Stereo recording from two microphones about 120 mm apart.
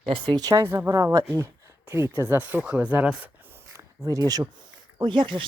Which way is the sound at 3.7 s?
30° right (ahead or behind).